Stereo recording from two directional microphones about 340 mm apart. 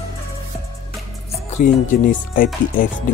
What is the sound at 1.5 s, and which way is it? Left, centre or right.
Speech, left.